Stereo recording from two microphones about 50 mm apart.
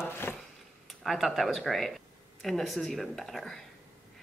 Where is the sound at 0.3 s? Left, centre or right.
Left.